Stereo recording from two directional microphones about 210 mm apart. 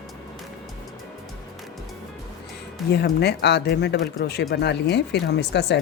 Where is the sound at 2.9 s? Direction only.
50° left (ahead or behind).